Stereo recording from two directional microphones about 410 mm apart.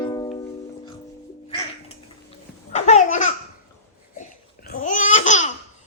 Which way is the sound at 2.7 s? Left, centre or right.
Centre.